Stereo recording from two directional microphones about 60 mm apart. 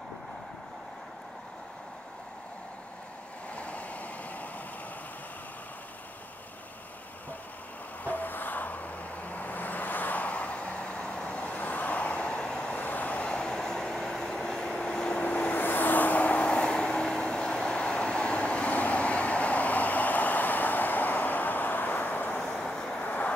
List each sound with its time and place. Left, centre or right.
3.5 s vehicle: left
8.0 s vehicle: left
13.3 s train: centre; by 22.4 s left
22.4 s vehicle: centre